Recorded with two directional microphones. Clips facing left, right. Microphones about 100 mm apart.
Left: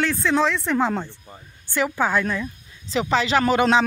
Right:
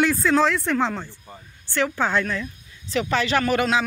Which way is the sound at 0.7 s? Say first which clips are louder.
Left 2 dB; 15° left (ahead or behind).